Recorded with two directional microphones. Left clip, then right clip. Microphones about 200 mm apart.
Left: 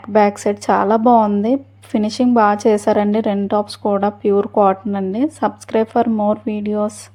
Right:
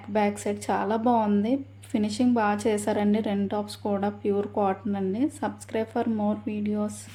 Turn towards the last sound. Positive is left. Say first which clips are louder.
# left 11 dB
turn(degrees=35)  # may be behind; listen again after turning